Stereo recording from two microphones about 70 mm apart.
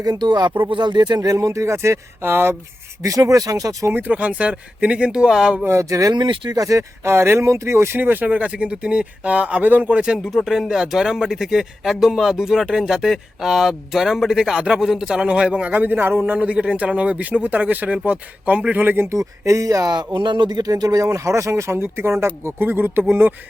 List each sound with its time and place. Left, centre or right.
0.0 s speech: right
1.4 s speech: right
3.0 s speech: right
3.9 s speech: right
5.8 s speech: right
6.1 s speech: right
6.6 s speech: right
7.1 s speech: right
10.0 s speech: centre
19.0 s speech: right
20.1 s speech: right